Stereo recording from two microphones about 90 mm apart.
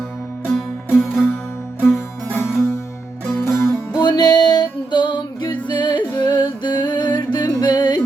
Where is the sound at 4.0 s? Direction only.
55° left (ahead or behind).